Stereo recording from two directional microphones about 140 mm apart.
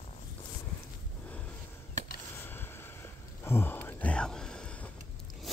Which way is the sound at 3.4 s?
15° left (ahead or behind).